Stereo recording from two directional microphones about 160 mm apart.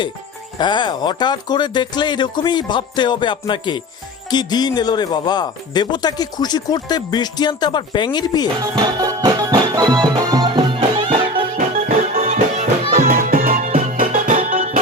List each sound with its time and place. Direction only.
0.6 s speech: 30° left (ahead or behind)
8.7 s music: 25° right (ahead or behind)
11.5 s music: 55° right (ahead or behind)